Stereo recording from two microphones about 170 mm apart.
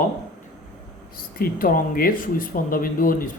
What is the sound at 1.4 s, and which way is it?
Speech, 55° left (ahead or behind).